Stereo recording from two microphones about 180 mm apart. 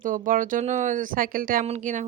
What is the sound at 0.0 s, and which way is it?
Speech, 50° right (ahead or behind).